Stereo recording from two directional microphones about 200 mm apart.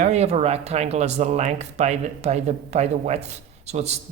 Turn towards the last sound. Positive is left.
turn(degrees=-30)  # may be behind; listen again after turning